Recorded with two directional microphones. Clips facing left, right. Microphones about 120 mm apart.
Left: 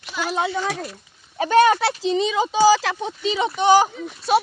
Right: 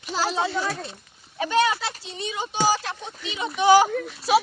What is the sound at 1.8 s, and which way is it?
Speech, 85° left.